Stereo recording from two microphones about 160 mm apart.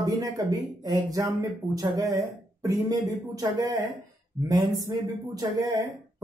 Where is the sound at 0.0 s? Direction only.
20° right (ahead or behind).